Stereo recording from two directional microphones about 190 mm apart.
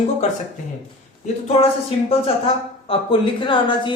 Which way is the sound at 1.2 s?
35° left (ahead or behind).